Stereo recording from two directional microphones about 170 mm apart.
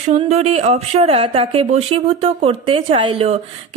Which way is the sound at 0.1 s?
40° right (ahead or behind).